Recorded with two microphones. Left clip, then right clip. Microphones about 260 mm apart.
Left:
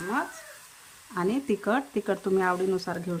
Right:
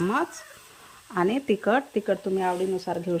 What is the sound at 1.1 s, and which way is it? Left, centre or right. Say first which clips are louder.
Speech: right 4 dB; centre.